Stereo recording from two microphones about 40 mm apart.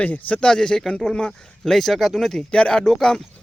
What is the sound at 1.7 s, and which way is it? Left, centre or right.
Speech, centre.